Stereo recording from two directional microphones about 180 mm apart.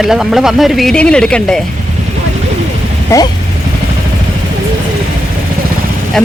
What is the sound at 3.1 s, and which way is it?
Speech, 15° left (ahead or behind).